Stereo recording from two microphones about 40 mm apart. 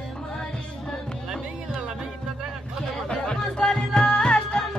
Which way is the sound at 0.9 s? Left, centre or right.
Centre.